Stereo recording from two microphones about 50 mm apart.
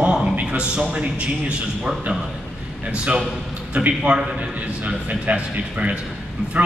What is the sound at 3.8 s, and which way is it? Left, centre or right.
A man's voice, right.